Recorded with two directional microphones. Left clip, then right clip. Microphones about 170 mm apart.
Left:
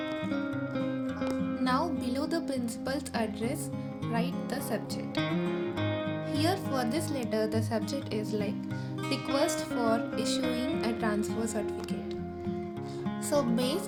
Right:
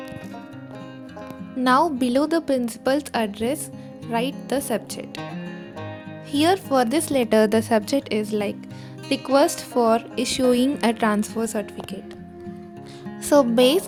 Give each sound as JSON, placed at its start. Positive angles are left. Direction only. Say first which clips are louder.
{"t": 1.6, "sound": "speech", "louder": "right 13 dB", "side_deg": -60}
{"t": 6.3, "sound": "speech", "louder": "right 13 dB", "side_deg": -60}
{"t": 13.3, "sound": "speech", "louder": "right 13 dB", "side_deg": -60}